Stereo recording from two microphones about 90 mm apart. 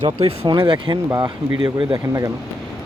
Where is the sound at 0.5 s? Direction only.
65° right (ahead or behind).